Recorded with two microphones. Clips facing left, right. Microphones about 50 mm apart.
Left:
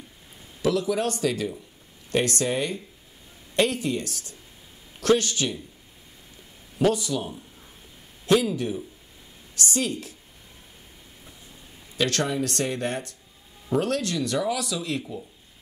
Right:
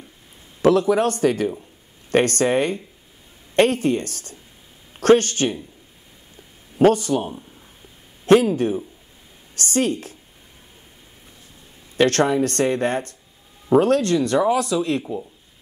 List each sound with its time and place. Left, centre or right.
0.6 s speech: right
6.8 s speech: right
8.3 s speech: right
12.0 s speech: right